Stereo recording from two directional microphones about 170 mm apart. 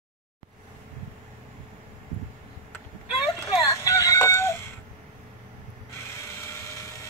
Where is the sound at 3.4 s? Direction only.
20° left (ahead or behind).